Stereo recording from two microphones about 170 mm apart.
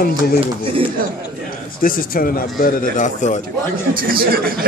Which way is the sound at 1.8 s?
55° left (ahead or behind).